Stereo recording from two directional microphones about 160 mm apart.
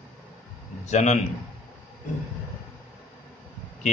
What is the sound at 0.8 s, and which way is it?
Speech, 45° left (ahead or behind).